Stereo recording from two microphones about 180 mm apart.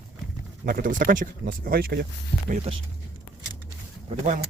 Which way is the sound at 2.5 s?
35° right (ahead or behind).